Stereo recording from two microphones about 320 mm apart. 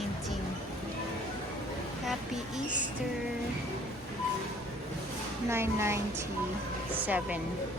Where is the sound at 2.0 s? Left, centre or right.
Centre.